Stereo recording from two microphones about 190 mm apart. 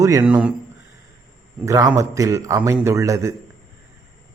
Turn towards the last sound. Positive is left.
turn(degrees=-15)  # may be behind; listen again after turning